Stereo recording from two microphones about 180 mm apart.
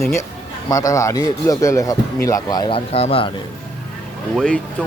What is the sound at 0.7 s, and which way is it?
Speech, 20° left (ahead or behind).